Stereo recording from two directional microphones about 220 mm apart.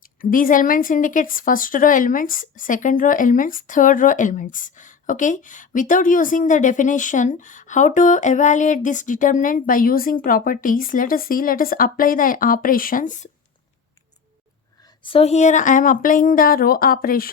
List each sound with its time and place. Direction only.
0.2 s a woman's voice: 40° left (ahead or behind)
15.0 s a woman's voice: 25° left (ahead or behind); by 17.2 s 40° left (ahead or behind)